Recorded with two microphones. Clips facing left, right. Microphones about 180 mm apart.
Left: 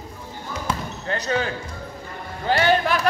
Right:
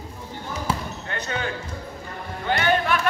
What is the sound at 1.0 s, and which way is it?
Basketball bounce, 40° left (ahead or behind).